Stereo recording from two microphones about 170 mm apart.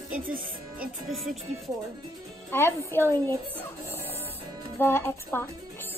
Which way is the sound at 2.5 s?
15° left (ahead or behind).